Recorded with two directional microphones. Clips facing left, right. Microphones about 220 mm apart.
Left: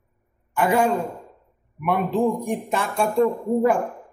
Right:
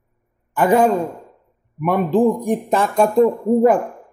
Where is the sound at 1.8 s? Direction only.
40° right (ahead or behind).